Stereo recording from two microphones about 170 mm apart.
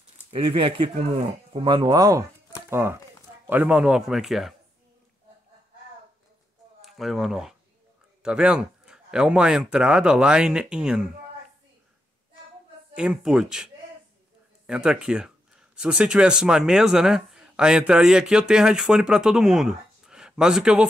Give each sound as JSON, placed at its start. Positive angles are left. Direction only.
{"t": 0.3, "sound": "speech", "side_deg": -30}
{"t": 6.8, "sound": "speech", "side_deg": 0}
{"t": 12.9, "sound": "speech", "side_deg": -5}
{"t": 14.7, "sound": "speech", "side_deg": -5}